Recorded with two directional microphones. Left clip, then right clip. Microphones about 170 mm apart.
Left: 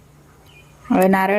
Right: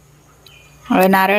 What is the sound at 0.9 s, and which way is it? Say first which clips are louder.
Speech: right 3 dB; centre (ahead or behind).